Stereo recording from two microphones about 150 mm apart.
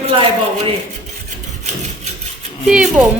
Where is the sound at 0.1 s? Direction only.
40° right (ahead or behind).